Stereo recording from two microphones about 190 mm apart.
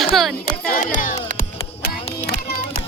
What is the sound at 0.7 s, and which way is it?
Music, 45° left (ahead or behind).